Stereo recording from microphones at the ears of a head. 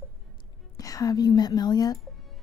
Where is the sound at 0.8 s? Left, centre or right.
Left.